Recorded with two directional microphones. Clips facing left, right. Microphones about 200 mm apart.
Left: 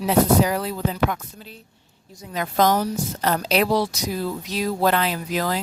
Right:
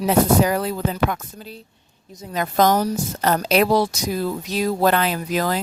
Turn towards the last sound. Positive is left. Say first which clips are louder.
# right 2 dB
turn(degrees=-50)  # may be behind; listen again after turning